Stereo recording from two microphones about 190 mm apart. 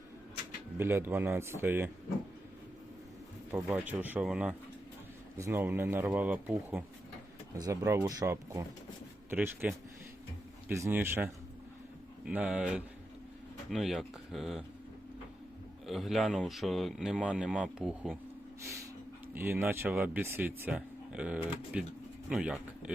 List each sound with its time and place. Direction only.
0.8 s speech: 10° right (ahead or behind)
3.5 s speech: 10° right (ahead or behind)
15.9 s speech: centre (ahead or behind)
19.3 s speech: 10° right (ahead or behind)